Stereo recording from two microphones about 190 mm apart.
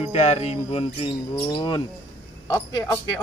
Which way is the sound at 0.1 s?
35° left (ahead or behind).